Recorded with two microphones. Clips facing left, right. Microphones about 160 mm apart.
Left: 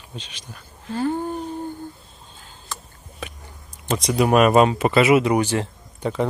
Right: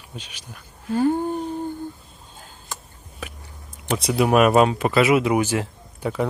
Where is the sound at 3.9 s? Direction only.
5° right (ahead or behind).